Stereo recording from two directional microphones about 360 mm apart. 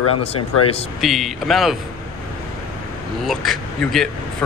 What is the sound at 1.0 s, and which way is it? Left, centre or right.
Speech, centre.